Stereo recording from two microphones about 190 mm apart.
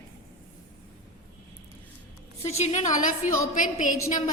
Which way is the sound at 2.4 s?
35° left (ahead or behind).